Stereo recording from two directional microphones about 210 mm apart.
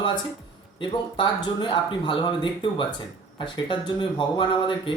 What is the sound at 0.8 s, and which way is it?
Speech, 25° left (ahead or behind).